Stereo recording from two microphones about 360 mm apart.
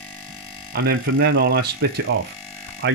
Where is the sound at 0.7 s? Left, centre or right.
Right.